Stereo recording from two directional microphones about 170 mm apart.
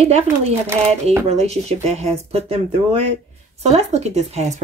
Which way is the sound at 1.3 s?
40° right (ahead or behind).